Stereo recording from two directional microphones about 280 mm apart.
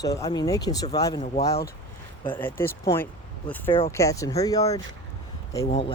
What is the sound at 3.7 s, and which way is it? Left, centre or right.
Speech, centre.